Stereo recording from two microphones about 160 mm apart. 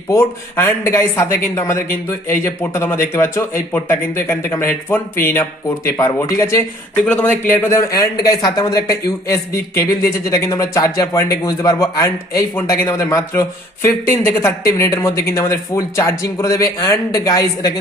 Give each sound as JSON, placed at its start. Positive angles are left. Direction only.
{"t": 0.1, "sound": "speech", "side_deg": 15}
{"t": 8.3, "sound": "speech", "side_deg": 25}